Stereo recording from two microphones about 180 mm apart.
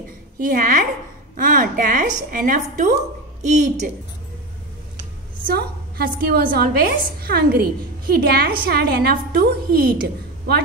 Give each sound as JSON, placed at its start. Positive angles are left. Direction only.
{"t": 0.4, "sound": "a woman's voice", "side_deg": -50}
{"t": 5.5, "sound": "a woman's voice", "side_deg": -60}